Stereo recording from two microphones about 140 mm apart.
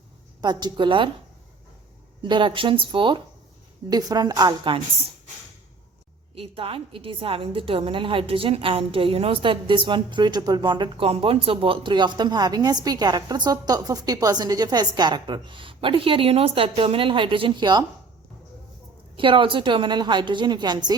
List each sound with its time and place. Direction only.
0.4 s a woman's voice: 30° right (ahead or behind)
2.2 s a woman's voice: 35° right (ahead or behind)
6.3 s a woman's voice: 40° right (ahead or behind)
19.1 s a woman's voice: 35° right (ahead or behind)